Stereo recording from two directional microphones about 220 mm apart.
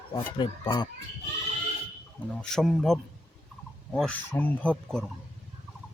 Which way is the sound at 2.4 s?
Centre (ahead or behind).